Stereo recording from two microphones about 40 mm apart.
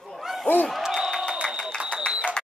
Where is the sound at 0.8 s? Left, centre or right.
Centre.